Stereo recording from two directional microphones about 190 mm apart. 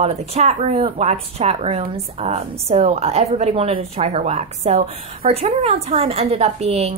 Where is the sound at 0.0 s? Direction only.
35° right (ahead or behind).